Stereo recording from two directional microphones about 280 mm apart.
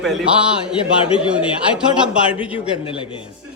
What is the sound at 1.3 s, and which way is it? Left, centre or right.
Speech, centre.